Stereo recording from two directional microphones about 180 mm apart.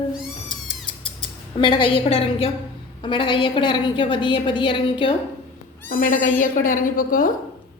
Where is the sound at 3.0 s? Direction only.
25° left (ahead or behind).